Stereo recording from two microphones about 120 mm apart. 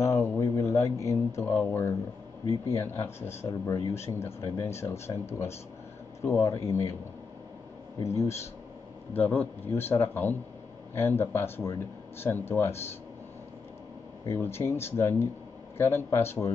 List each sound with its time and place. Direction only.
0.0 s speech: 25° left (ahead or behind)
6.2 s speech: 25° left (ahead or behind)
8.0 s speech: 25° left (ahead or behind)
14.2 s speech: 20° left (ahead or behind)